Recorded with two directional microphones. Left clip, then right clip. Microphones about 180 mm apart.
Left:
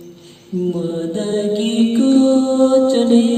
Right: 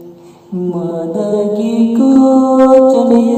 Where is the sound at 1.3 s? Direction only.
10° right (ahead or behind).